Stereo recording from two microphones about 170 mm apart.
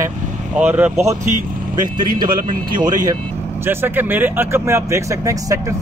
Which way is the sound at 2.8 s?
25° right (ahead or behind).